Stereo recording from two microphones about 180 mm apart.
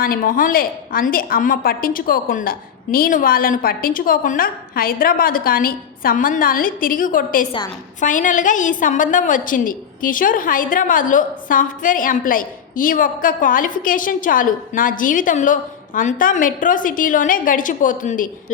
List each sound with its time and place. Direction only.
0.0 s a woman's voice: 55° left (ahead or behind)